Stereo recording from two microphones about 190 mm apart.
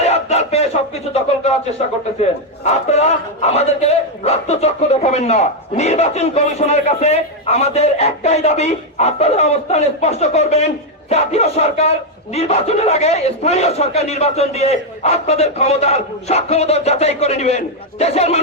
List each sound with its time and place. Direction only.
0.0 s battle cry: 35° left (ahead or behind)
2.6 s speech: 35° left (ahead or behind)